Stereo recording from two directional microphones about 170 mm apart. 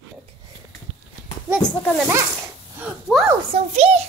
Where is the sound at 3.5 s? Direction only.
40° right (ahead or behind).